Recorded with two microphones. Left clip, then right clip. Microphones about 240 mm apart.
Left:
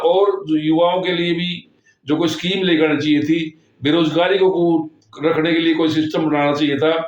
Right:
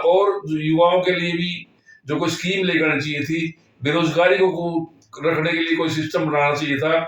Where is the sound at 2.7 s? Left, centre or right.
Left.